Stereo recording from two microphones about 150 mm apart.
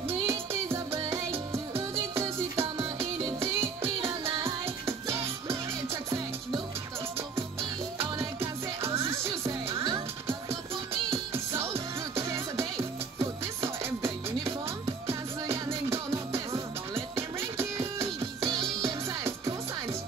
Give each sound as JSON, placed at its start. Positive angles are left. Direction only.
{"t": 2.1, "sound": "music", "side_deg": -20}
{"t": 3.8, "sound": "music", "side_deg": -40}
{"t": 8.4, "sound": "music", "side_deg": -20}
{"t": 11.3, "sound": "music", "side_deg": -15}
{"t": 18.4, "sound": "music", "side_deg": -30}